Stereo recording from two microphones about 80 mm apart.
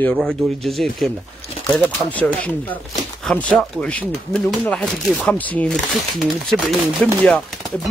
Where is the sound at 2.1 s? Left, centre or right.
Centre.